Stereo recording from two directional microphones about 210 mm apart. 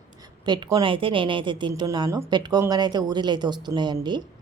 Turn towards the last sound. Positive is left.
turn(degrees=-20)  # may be behind; listen again after turning